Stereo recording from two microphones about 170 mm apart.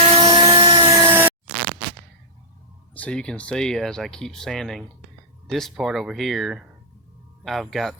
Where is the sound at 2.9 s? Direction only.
5° left (ahead or behind).